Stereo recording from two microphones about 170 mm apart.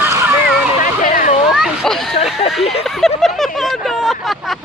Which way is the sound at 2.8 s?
Centre (ahead or behind).